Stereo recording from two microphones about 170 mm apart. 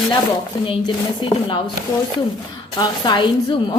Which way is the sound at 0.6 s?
30° left (ahead or behind).